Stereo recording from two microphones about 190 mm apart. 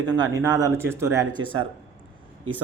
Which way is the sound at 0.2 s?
20° right (ahead or behind).